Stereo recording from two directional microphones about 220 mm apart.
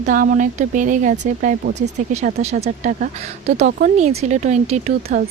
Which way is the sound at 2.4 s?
30° right (ahead or behind).